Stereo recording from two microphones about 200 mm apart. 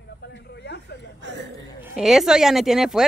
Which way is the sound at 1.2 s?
60° right (ahead or behind).